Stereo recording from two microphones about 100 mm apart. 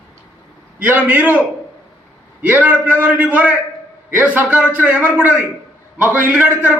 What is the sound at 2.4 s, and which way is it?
A man's voice, 15° right (ahead or behind).